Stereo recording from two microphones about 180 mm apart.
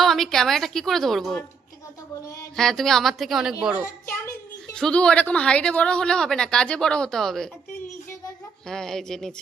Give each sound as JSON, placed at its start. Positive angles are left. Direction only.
{"t": 0.0, "sound": "speech", "side_deg": 0}
{"t": 2.6, "sound": "a child's voice", "side_deg": 0}
{"t": 3.8, "sound": "a child's voice", "side_deg": 15}
{"t": 4.7, "sound": "speech", "side_deg": 5}
{"t": 8.6, "sound": "speech", "side_deg": 5}